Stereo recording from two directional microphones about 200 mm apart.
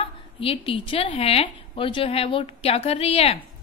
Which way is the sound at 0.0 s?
25° left (ahead or behind).